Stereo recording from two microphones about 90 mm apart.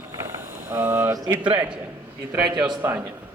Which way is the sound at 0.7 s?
25° right (ahead or behind).